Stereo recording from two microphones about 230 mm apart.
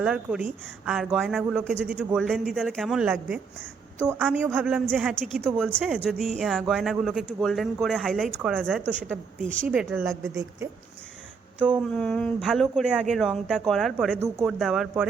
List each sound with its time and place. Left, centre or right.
0.0 s speech: centre
9.4 s speech: right
9.6 s speech: centre
11.6 s speech: centre